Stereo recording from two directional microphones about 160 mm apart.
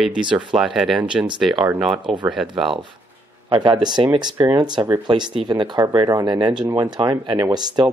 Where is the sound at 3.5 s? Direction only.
25° right (ahead or behind).